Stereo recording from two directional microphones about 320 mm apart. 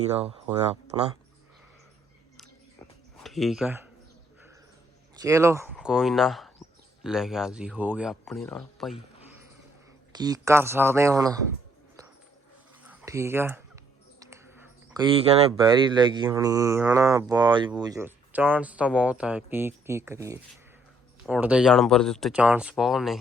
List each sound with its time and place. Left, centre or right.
0.0 s speech: centre
3.2 s speech: centre
5.2 s speech: centre
10.1 s speech: centre
12.9 s speech: centre